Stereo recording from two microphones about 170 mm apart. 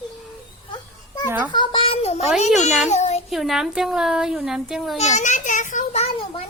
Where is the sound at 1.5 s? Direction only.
30° left (ahead or behind).